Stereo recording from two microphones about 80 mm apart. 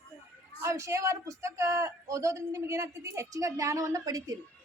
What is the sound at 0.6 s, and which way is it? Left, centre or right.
A man's voice, right.